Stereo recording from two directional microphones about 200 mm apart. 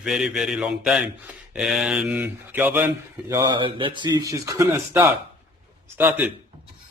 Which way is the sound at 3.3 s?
20° right (ahead or behind).